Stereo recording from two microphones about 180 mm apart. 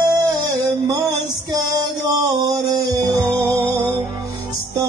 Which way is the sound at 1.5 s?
20° right (ahead or behind).